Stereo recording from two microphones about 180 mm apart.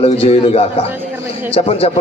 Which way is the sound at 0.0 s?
35° left (ahead or behind).